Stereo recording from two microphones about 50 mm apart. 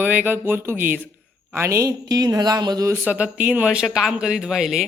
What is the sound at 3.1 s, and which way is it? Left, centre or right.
Speech, right.